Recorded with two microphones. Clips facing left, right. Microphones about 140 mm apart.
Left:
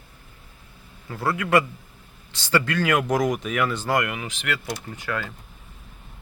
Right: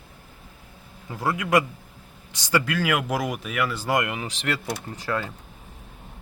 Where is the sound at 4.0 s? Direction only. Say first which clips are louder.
Even; 25° right (ahead or behind).